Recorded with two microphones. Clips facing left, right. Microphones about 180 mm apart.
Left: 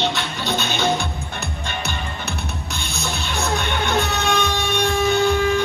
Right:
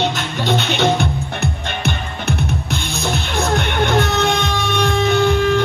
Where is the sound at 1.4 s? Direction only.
60° right (ahead or behind).